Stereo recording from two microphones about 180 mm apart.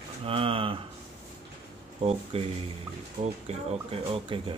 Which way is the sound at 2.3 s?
35° right (ahead or behind).